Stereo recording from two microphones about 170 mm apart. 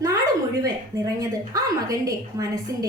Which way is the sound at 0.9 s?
20° right (ahead or behind).